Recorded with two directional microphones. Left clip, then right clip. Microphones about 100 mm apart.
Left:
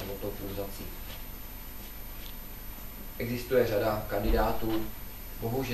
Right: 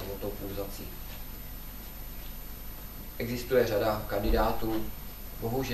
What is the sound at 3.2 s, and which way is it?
Speech, 30° right (ahead or behind).